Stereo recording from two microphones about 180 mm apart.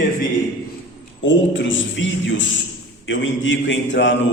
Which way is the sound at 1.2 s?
90° left.